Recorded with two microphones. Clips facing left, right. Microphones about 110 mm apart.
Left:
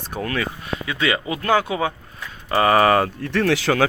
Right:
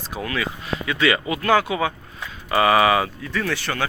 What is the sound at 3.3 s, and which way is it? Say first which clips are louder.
Speech: left 6 dB; 70° left (ahead or behind).